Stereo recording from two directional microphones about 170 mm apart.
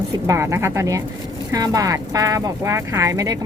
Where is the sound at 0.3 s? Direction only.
15° right (ahead or behind).